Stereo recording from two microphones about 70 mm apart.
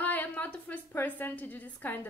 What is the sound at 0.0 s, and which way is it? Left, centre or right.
A woman's voice, left.